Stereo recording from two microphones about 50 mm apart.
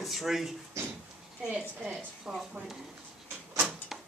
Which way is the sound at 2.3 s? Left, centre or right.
Centre.